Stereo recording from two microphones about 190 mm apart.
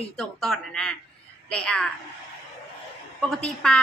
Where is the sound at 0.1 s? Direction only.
Centre (ahead or behind).